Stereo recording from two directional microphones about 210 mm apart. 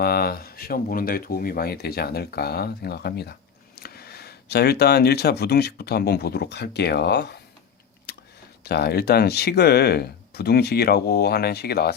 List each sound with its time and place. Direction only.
0.0 s speech: 50° left (ahead or behind)
8.1 s a sound: 50° left (ahead or behind)
8.6 s speech: 50° left (ahead or behind)